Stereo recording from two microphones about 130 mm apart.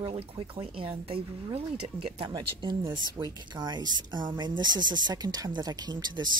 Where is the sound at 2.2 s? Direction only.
35° right (ahead or behind).